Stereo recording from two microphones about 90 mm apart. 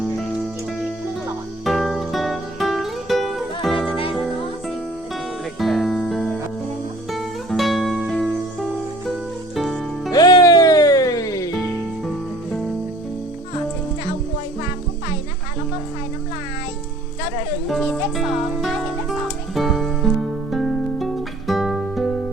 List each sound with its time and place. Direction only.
1.6 s music: centre (ahead or behind)
3.8 s music: 80° left
5.5 s music: centre (ahead or behind)
9.6 s music: centre (ahead or behind)
10.1 s music: 45° left (ahead or behind)
17.7 s music: 5° left (ahead or behind)
19.5 s music: centre (ahead or behind)